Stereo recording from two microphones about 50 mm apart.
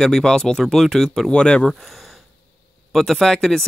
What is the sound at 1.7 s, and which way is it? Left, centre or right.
Speech, centre.